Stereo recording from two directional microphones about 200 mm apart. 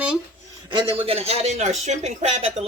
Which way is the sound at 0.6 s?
25° right (ahead or behind).